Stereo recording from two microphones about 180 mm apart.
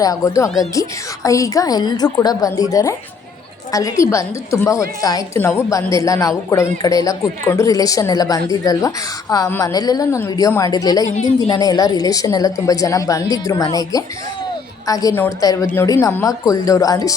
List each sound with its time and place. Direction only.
0.0 s a woman's voice: 20° left (ahead or behind)